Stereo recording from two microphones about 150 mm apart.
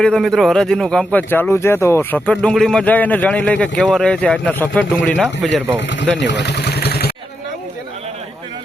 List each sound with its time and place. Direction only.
0.0 s speech: 5° left (ahead or behind)
6.6 s vehicle: 90° left